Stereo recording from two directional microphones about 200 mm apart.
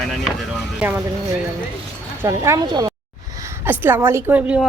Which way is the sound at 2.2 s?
15° right (ahead or behind).